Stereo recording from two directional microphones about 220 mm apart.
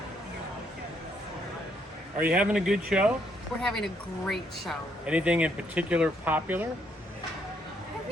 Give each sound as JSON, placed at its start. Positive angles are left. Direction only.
{"t": 2.2, "sound": "speech", "side_deg": -5}